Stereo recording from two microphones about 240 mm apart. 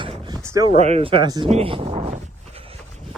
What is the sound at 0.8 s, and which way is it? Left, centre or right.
Speech, right.